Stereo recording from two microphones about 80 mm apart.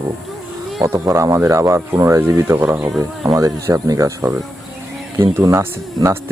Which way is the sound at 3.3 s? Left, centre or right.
Right.